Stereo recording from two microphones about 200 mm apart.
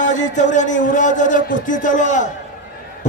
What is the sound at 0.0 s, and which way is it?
Speech, 40° left (ahead or behind).